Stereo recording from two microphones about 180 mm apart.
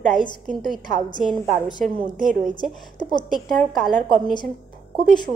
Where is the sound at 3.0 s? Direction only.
25° left (ahead or behind).